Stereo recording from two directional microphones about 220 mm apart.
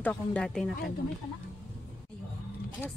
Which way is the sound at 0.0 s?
5° left (ahead or behind).